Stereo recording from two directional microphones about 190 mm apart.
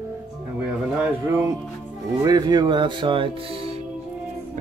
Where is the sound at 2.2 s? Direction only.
20° right (ahead or behind).